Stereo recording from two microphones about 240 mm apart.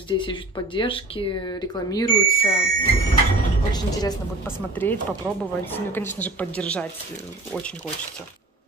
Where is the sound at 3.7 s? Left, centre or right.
Centre.